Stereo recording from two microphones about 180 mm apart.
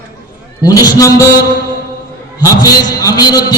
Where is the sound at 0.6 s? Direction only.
20° left (ahead or behind).